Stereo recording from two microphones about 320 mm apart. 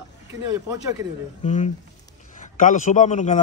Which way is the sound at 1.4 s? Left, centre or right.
Left.